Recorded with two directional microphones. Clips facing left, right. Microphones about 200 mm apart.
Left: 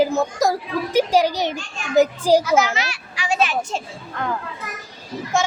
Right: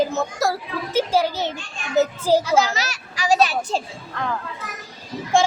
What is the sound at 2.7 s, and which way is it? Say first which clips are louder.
A child's voice: left 1 dB; 40° right (ahead or behind).